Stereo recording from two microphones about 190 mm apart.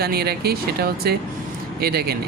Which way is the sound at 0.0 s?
55° right (ahead or behind).